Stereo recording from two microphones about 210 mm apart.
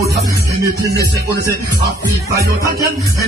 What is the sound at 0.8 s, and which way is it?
Speech, 15° right (ahead or behind).